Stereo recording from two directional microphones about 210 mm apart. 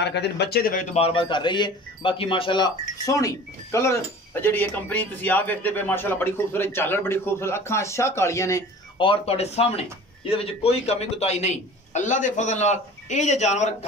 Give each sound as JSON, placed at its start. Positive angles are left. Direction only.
{"t": 0.0, "sound": "speech", "side_deg": 55}
{"t": 0.9, "sound": "speech", "side_deg": 25}